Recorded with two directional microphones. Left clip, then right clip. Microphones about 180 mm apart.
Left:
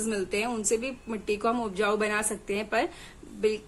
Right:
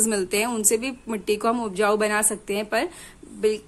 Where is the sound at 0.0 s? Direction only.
45° right (ahead or behind).